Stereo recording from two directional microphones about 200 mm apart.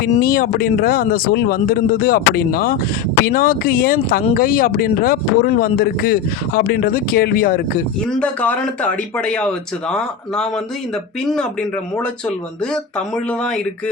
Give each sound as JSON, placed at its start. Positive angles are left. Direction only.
{"t": 0.1, "sound": "speech", "side_deg": 50}
{"t": 8.1, "sound": "speech", "side_deg": 5}
{"t": 13.4, "sound": "speech", "side_deg": 5}